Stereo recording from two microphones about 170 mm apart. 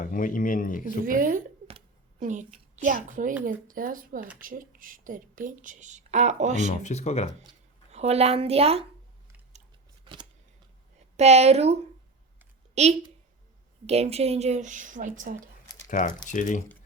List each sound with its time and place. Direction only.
0.0 s speech: 50° left (ahead or behind)
1.0 s speech: 55° right (ahead or behind)
1.6 s a sound: 40° right (ahead or behind)
3.4 s speech: 55° right (ahead or behind)
6.8 s speech: 40° left (ahead or behind)
7.9 s speech: 40° right (ahead or behind)
10.0 s a sound: 30° right (ahead or behind)
11.2 s a woman's voice: 40° right (ahead or behind)
15.9 s speech: 50° left (ahead or behind)